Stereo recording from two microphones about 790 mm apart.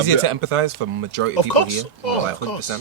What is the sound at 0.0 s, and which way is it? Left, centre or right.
Speech, right.